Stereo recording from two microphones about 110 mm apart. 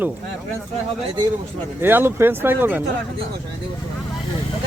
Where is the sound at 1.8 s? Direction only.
20° right (ahead or behind).